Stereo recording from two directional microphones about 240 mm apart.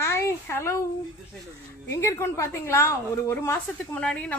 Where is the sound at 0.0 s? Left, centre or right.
Centre.